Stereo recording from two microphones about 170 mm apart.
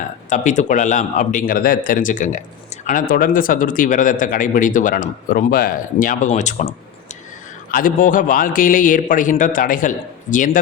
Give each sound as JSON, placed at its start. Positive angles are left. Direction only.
{"t": 0.3, "sound": "speech", "side_deg": 45}